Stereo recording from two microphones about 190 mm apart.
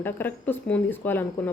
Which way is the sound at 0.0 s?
10° left (ahead or behind).